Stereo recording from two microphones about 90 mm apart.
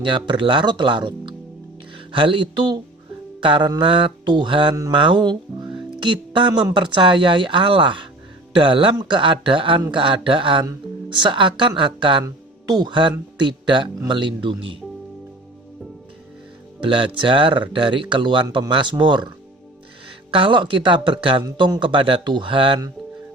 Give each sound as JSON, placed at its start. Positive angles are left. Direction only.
{"t": 0.0, "sound": "speech", "side_deg": -65}
{"t": 12.2, "sound": "speech", "side_deg": -50}
{"t": 16.8, "sound": "speech", "side_deg": -70}
{"t": 20.3, "sound": "speech", "side_deg": -70}